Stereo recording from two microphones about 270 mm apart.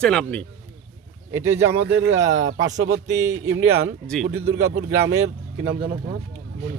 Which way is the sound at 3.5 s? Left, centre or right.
Right.